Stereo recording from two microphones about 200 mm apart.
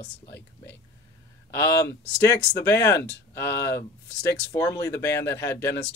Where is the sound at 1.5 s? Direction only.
15° left (ahead or behind).